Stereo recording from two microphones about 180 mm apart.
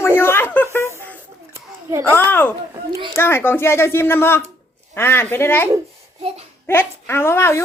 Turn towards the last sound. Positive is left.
turn(degrees=15)  # may be behind; listen again after turning